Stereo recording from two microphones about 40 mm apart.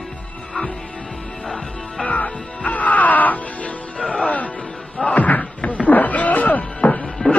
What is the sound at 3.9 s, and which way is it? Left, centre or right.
Music, left.